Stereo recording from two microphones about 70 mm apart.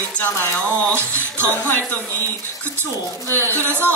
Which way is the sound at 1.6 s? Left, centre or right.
Left.